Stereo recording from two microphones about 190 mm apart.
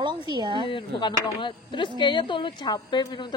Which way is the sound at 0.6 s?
25° left (ahead or behind).